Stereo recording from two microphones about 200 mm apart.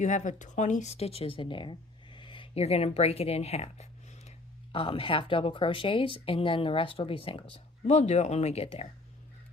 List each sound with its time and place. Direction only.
0.0 s speech: 35° left (ahead or behind)